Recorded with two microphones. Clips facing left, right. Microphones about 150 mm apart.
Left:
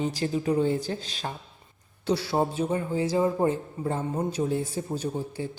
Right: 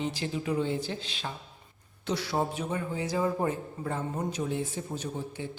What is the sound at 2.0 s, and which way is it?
A man's voice, 30° left (ahead or behind).